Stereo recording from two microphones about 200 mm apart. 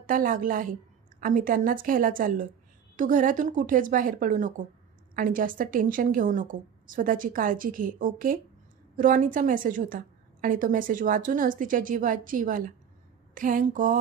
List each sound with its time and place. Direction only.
0.0 s a woman's voice: 45° right (ahead or behind)